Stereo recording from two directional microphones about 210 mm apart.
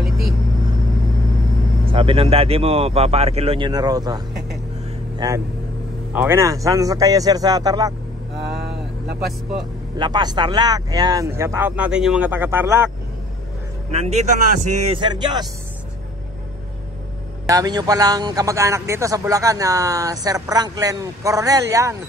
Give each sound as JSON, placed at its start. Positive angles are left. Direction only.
{"t": 1.9, "sound": "speech", "side_deg": -25}
{"t": 5.1, "sound": "vehicle", "side_deg": -15}
{"t": 6.1, "sound": "a man's voice", "side_deg": -10}
{"t": 8.5, "sound": "vehicle", "side_deg": -50}
{"t": 9.9, "sound": "a man's voice", "side_deg": -20}
{"t": 13.9, "sound": "a man's voice", "side_deg": -30}
{"t": 17.5, "sound": "a man's voice", "side_deg": -20}